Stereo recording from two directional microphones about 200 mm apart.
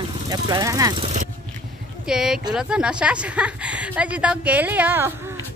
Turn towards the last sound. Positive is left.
turn(degrees=-10)  # may be behind; listen again after turning